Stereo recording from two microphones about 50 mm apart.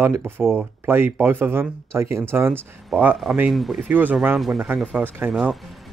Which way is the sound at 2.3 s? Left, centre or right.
Right.